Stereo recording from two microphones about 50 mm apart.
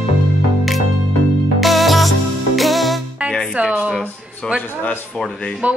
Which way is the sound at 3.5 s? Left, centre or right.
Right.